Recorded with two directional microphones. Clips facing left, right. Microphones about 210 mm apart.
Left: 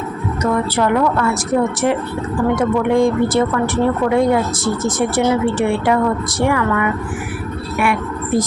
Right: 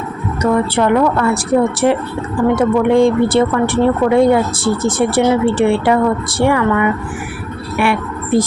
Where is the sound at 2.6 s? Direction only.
30° right (ahead or behind).